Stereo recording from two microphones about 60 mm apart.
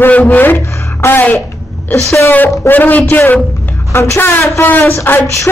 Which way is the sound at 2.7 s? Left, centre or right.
Left.